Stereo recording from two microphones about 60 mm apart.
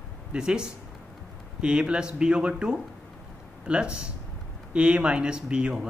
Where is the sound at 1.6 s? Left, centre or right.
Centre.